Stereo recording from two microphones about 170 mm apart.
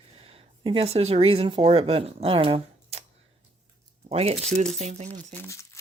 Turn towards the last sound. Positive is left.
turn(degrees=15)  # may be behind; listen again after turning